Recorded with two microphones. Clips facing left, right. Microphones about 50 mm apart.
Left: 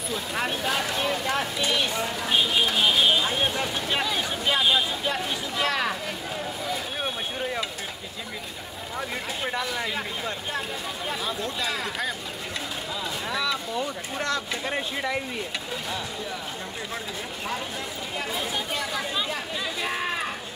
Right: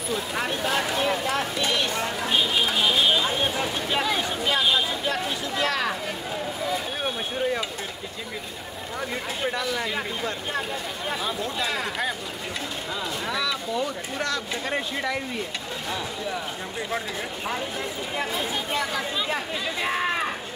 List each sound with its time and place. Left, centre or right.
0.1 s a sound: centre
9.5 s speech: centre
11.1 s speech: centre
13.3 s speech: centre